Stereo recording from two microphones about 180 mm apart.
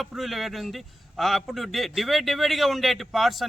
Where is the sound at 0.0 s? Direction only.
Centre (ahead or behind).